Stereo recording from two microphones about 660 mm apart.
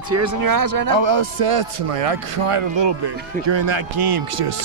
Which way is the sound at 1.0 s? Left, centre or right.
Right.